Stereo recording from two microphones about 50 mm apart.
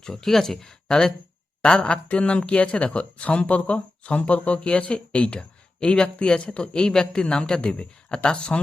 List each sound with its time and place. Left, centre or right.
0.0 s speech: centre